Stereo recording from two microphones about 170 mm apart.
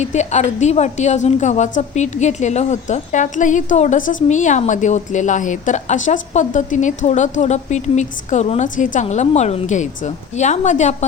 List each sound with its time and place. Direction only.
0.0 s a woman's voice: 40° left (ahead or behind)